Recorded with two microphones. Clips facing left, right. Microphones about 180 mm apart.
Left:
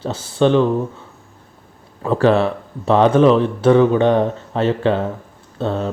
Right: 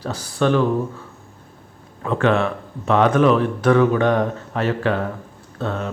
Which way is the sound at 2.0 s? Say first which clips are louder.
Left 4 dB; 35° left (ahead or behind).